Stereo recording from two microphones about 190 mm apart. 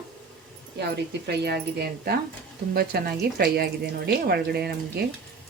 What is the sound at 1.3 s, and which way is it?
A woman's voice, 60° right (ahead or behind).